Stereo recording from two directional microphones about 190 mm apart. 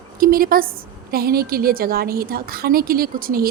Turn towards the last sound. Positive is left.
turn(degrees=-50)  # may be behind; listen again after turning